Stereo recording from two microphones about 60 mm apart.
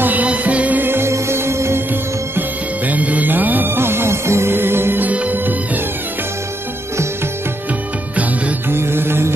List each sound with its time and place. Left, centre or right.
0.0 s music: right
0.8 s music: right
2.9 s music: right
5.0 s music: right
8.6 s music: right